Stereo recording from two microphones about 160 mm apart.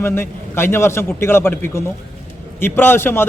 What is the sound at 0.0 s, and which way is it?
A man's voice, 15° left (ahead or behind).